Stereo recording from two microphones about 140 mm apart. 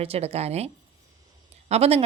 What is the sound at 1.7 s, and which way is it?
Speech, 45° right (ahead or behind).